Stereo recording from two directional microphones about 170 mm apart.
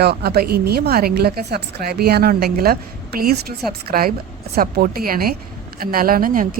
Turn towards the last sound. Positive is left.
turn(degrees=-55)  # may be behind; listen again after turning